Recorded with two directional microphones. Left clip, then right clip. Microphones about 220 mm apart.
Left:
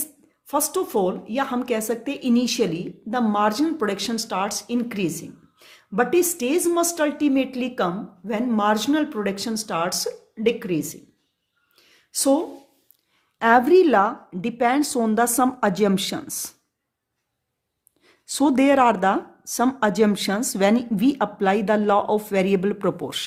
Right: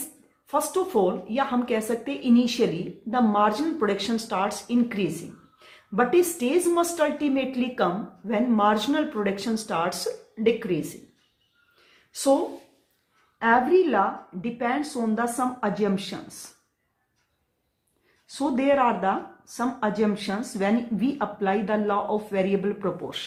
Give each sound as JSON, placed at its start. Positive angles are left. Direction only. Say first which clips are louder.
{"t": 0.4, "sound": "speech", "louder": "left 1 dB", "side_deg": 50}
{"t": 11.9, "sound": "a sound", "louder": "left 1 dB", "side_deg": 50}
{"t": 13.4, "sound": "speech", "louder": "left 4 dB", "side_deg": 55}
{"t": 18.3, "sound": "speech", "louder": "left 5 dB", "side_deg": 55}